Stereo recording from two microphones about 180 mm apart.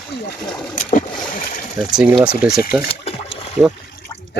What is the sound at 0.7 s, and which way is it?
Boat, 45° left (ahead or behind).